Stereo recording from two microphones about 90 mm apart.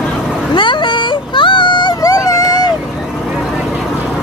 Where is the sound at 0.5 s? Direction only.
60° left (ahead or behind).